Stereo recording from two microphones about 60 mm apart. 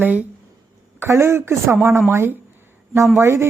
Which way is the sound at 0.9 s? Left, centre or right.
Right.